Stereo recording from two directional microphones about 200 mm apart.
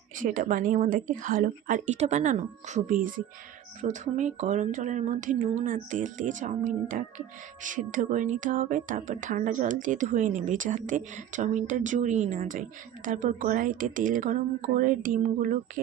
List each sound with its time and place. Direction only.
0.2 s speech: 40° right (ahead or behind)